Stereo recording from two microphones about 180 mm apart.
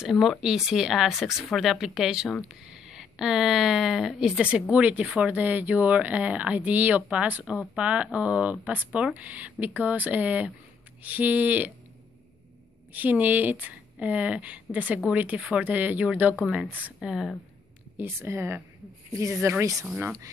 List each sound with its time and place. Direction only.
0.0 s speech: centre (ahead or behind)
12.9 s speech: 10° right (ahead or behind)